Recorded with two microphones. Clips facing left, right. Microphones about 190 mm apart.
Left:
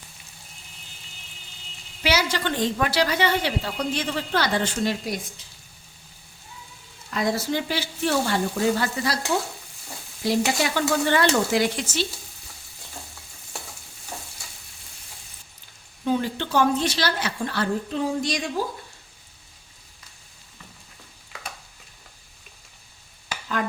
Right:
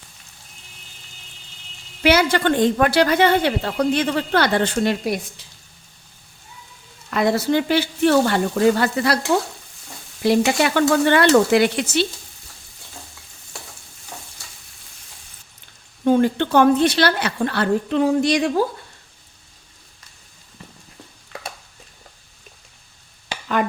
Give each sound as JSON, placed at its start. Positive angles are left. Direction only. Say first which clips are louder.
{"t": 2.0, "sound": "a woman's voice", "louder": "right 7 dB", "side_deg": -55}
{"t": 7.1, "sound": "a woman's voice", "louder": "right 6 dB", "side_deg": -65}
{"t": 10.2, "sound": "a woman's voice", "louder": "right 6 dB", "side_deg": -65}
{"t": 16.0, "sound": "a woman's voice", "louder": "right 8 dB", "side_deg": -55}